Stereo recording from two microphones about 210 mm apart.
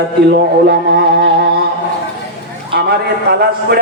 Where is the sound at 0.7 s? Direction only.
50° right (ahead or behind).